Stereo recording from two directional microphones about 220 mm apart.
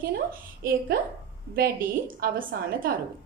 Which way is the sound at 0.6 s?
40° right (ahead or behind).